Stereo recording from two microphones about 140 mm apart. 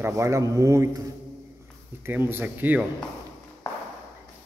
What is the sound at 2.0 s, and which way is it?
Speech, 15° right (ahead or behind).